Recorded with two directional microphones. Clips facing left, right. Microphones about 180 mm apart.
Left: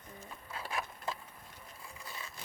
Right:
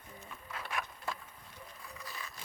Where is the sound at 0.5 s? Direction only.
30° left (ahead or behind).